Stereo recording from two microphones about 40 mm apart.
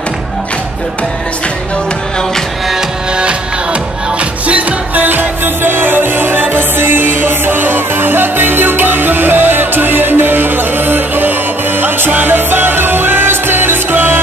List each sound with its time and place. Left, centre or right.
4.2 s music: right
5.0 s music: right